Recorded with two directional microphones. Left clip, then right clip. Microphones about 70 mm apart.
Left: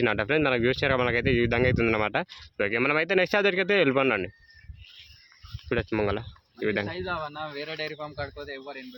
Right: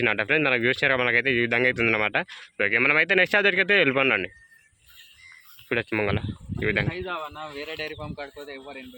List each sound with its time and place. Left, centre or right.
0.0 s speech: left
5.6 s speech: centre
6.8 s a man's voice: right
7.1 s speech: centre
7.4 s speech: left